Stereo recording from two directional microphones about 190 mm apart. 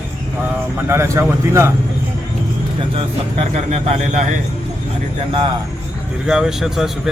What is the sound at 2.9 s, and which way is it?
Speech, 35° right (ahead or behind).